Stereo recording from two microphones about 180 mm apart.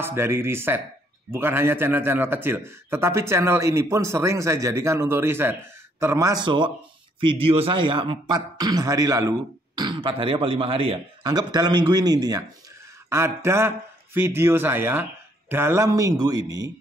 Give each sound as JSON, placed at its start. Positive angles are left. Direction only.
{"t": 0.0, "sound": "a man's voice", "side_deg": -15}